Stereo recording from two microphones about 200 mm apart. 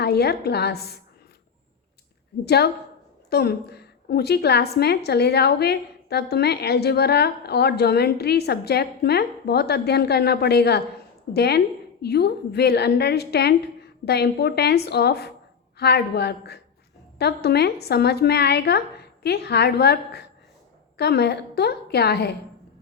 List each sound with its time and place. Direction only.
0.0 s a woman's voice: 55° left (ahead or behind)
2.4 s a woman's voice: 55° left (ahead or behind)